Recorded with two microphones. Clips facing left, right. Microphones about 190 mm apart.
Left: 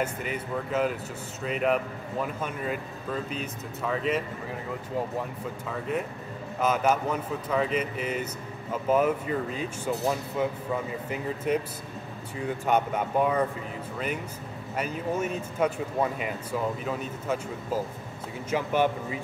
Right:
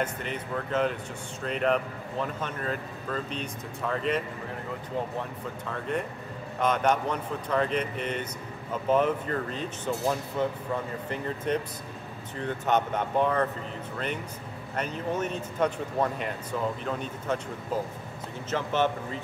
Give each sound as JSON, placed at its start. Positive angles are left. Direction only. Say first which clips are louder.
{"t": 0.0, "sound": "speech", "louder": "left 1 dB", "side_deg": 5}
{"t": 5.7, "sound": "speech", "louder": "left 1 dB", "side_deg": 5}
{"t": 18.5, "sound": "speech", "louder": "left 2 dB", "side_deg": 10}